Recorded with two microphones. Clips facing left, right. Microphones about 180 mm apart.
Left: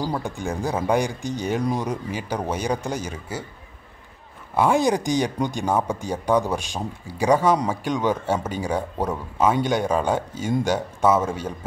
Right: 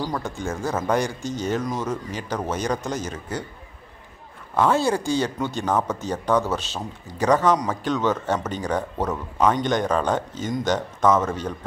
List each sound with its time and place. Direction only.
0.0 s speech: 10° left (ahead or behind)
4.6 s speech: 15° left (ahead or behind)